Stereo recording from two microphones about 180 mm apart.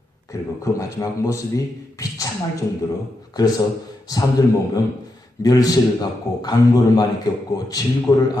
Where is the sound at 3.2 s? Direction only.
20° left (ahead or behind).